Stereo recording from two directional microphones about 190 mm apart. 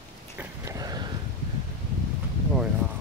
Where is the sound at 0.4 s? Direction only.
15° right (ahead or behind).